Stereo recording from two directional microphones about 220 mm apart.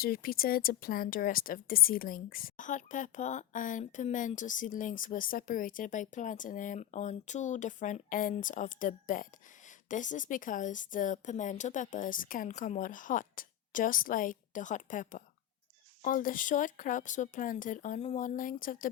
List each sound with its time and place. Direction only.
0.0 s speech: 40° left (ahead or behind)